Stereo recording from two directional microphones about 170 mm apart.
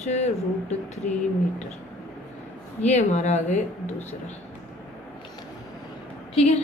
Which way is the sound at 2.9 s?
45° left (ahead or behind).